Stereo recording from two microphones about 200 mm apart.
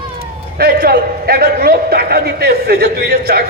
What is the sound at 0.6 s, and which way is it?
A man's voice, 50° right (ahead or behind).